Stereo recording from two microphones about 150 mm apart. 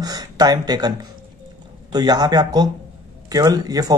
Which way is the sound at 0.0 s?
25° right (ahead or behind).